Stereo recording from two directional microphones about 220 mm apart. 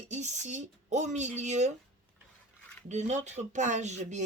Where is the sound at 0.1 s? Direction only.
30° right (ahead or behind).